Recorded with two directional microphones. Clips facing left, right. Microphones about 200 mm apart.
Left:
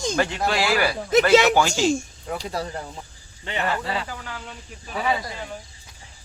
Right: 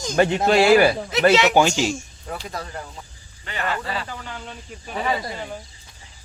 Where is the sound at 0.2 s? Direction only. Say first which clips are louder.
Right 9 dB; 20° right (ahead or behind).